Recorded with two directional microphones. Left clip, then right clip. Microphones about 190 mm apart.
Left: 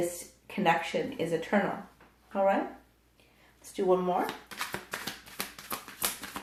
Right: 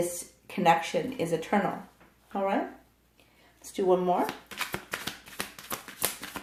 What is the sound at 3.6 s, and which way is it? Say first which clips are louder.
Speech: right 2 dB; 45° right (ahead or behind).